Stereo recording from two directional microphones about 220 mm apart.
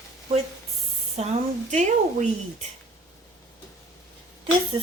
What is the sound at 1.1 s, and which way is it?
Speech, 30° right (ahead or behind).